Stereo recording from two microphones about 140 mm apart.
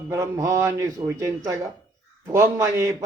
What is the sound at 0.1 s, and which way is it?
A man's voice, 20° right (ahead or behind).